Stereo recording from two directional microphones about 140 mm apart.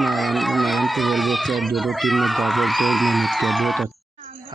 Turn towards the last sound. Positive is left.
turn(degrees=0)  # may be behind; listen again after turning